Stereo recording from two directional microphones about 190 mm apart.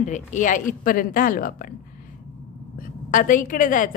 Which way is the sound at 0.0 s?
40° left (ahead or behind).